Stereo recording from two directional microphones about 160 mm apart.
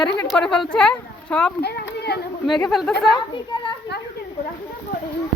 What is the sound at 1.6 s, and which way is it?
Speech, 90° left.